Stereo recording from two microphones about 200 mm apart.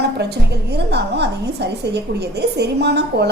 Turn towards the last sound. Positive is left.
turn(degrees=-55)  # may be behind; listen again after turning